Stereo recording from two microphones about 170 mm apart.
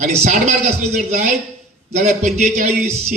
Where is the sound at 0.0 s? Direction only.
45° right (ahead or behind).